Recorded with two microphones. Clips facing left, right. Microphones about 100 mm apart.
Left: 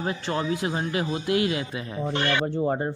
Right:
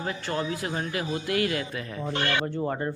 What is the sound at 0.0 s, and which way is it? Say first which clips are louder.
A man's voice: left 2 dB; 25° left (ahead or behind).